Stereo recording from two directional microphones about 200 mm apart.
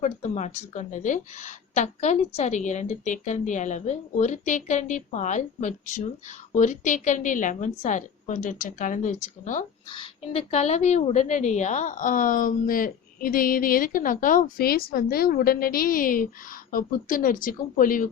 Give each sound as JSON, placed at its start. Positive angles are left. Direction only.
{"t": 0.0, "sound": "speech", "side_deg": 35}
{"t": 9.9, "sound": "a woman's voice", "side_deg": 25}